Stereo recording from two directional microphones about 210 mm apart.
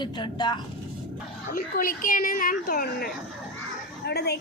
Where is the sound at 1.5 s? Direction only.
40° left (ahead or behind).